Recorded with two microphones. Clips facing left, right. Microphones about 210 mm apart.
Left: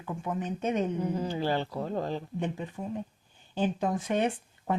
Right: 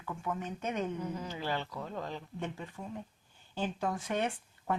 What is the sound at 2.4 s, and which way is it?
Speech, 15° left (ahead or behind).